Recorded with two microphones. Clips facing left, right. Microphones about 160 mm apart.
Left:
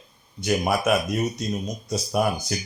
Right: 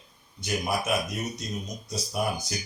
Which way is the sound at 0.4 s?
60° left (ahead or behind).